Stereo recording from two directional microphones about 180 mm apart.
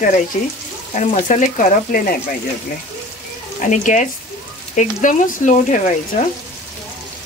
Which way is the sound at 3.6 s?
45° left (ahead or behind).